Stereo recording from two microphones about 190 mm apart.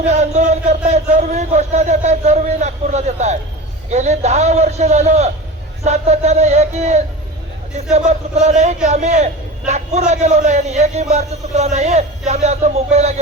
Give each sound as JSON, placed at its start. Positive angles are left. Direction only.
{"t": 0.1, "sound": "speech", "side_deg": -40}